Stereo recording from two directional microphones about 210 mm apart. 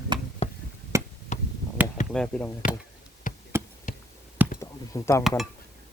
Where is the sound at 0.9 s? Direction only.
15° right (ahead or behind).